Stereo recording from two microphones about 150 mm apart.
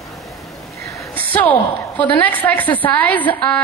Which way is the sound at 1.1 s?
10° left (ahead or behind).